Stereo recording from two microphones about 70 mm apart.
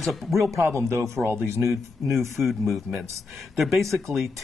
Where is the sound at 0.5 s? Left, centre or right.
Right.